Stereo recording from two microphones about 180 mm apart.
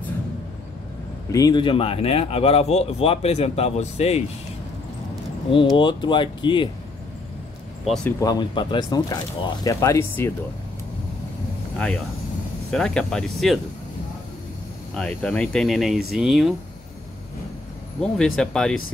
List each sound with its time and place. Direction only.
1.3 s speech: 20° left (ahead or behind)
5.5 s speech: 25° left (ahead or behind)
7.8 s speech: centre (ahead or behind)
8.2 s speech: 20° left (ahead or behind)
12.7 s speech: 5° left (ahead or behind)
15.0 s speech: 5° left (ahead or behind)
18.0 s speech: 5° left (ahead or behind)